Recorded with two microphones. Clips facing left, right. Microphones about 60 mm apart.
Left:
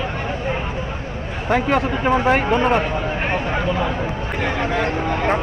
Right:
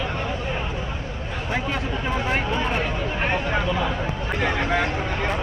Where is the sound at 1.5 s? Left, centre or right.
Left.